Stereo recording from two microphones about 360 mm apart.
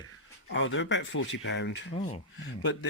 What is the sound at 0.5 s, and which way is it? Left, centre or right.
A man's voice, left.